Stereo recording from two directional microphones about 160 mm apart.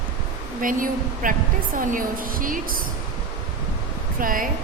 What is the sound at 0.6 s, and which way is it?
A woman's voice, 60° right (ahead or behind).